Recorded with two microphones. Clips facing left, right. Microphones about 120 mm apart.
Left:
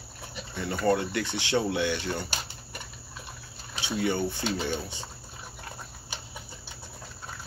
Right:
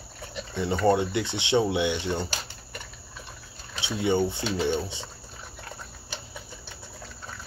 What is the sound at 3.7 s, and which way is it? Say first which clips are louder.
Speech: right 3 dB; 20° right (ahead or behind).